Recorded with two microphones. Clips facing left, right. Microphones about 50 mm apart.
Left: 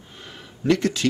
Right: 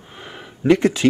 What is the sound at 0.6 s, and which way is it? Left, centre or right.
Speech, right.